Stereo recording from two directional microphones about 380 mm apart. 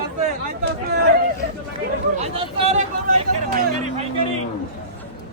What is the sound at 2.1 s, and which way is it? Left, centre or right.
Speech, centre.